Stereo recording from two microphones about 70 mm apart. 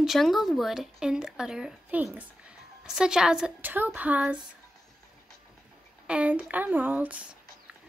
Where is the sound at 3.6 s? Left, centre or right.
Right.